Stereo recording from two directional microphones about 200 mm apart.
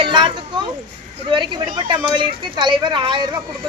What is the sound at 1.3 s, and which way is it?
Speech, 25° right (ahead or behind).